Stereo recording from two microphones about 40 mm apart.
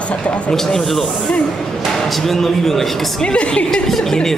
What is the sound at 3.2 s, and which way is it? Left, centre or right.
Speech, left.